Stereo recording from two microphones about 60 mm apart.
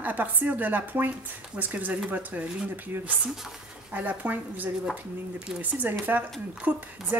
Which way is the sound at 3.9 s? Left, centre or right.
Right.